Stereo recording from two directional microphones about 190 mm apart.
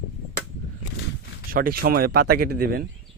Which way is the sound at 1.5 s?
50° right (ahead or behind).